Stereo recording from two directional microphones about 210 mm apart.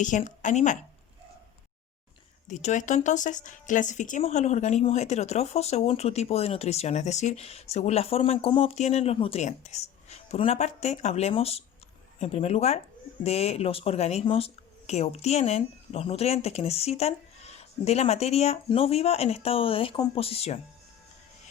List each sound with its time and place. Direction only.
0.0 s a woman's voice: 35° left (ahead or behind)
2.5 s a woman's voice: 35° left (ahead or behind)